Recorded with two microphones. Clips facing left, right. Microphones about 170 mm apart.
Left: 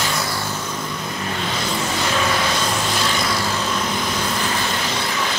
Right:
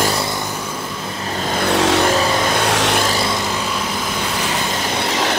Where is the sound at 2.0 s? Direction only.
40° right (ahead or behind).